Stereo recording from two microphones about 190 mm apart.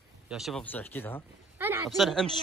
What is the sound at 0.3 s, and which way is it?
Speech, centre (ahead or behind).